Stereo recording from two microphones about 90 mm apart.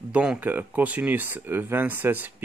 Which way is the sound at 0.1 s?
10° right (ahead or behind).